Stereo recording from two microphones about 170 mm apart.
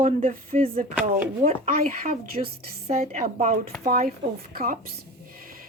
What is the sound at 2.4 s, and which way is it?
A woman's voice, 35° right (ahead or behind).